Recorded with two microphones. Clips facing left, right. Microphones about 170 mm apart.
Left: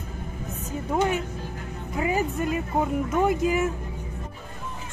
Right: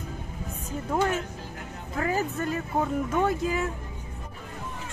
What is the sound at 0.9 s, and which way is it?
Speech, 15° left (ahead or behind).